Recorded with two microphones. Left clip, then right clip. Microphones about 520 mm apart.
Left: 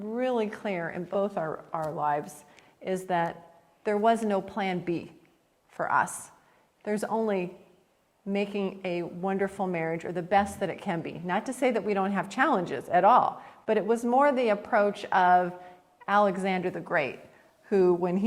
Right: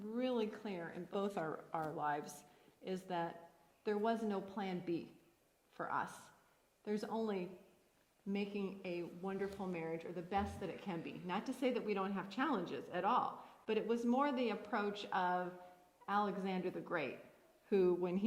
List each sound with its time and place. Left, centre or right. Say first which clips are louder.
0.1 s a woman's voice: left 11 dB; left
1.1 s a woman's voice: left 11 dB; centre